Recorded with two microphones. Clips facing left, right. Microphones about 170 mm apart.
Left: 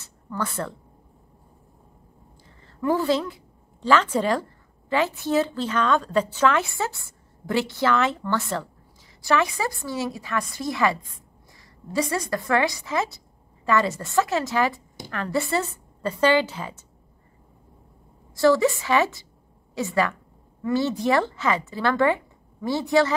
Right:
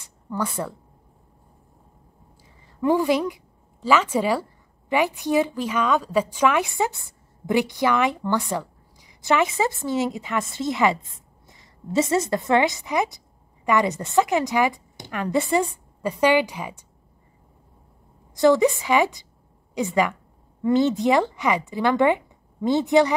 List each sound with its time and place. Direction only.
0.0 s speech: 10° right (ahead or behind)
2.6 s a woman's voice: 15° right (ahead or behind)
18.3 s a woman's voice: 20° right (ahead or behind)